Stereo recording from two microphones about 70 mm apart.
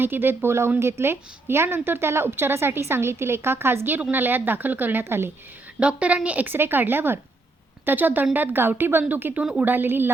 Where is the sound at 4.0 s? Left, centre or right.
Right.